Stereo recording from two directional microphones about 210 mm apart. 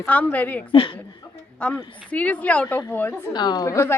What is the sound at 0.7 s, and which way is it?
Speech, 25° left (ahead or behind).